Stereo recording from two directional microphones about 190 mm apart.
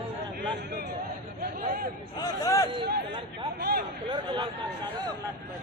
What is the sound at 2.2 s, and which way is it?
Speech, 15° left (ahead or behind).